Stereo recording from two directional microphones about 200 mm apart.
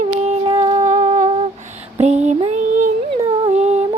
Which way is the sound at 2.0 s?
35° right (ahead or behind).